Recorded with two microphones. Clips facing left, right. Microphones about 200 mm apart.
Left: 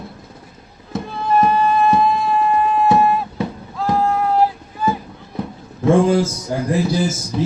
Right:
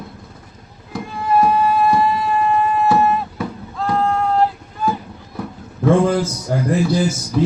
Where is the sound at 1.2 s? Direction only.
10° right (ahead or behind).